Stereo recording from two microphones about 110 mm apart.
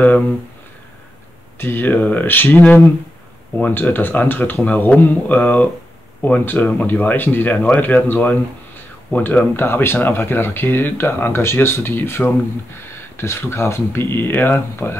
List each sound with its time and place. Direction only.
1.6 s speech: 20° left (ahead or behind)